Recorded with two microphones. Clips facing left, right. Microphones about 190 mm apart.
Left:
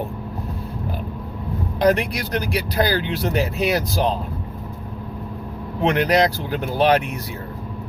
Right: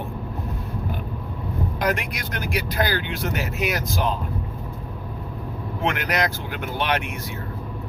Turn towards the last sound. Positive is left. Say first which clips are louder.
# left 7 dB
turn(degrees=35)  # may be behind; listen again after turning